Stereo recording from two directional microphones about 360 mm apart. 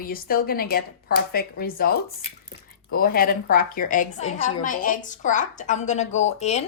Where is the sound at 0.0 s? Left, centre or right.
Left.